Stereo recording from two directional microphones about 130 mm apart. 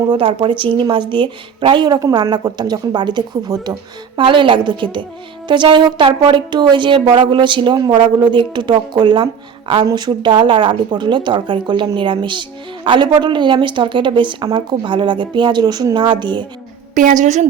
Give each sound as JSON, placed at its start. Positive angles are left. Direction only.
{"t": 0.1, "sound": "speech", "side_deg": -40}
{"t": 16.9, "sound": "a woman's voice", "side_deg": -80}